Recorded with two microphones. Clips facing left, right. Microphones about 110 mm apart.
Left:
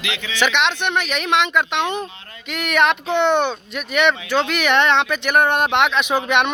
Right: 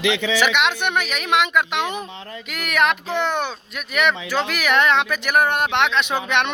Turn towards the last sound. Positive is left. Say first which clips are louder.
# left 2 dB
turn(degrees=10)  # may be behind; listen again after turning